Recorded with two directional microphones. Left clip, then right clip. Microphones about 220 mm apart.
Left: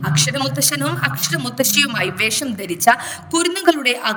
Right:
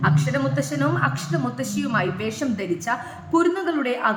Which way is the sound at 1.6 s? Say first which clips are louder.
Left 11 dB; 50° left (ahead or behind).